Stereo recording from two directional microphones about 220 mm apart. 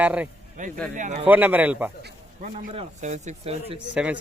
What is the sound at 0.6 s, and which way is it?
Speech, 35° right (ahead or behind).